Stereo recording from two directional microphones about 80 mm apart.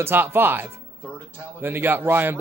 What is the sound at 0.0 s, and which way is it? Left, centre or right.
Speech, right.